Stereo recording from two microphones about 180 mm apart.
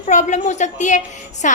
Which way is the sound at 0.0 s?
40° left (ahead or behind).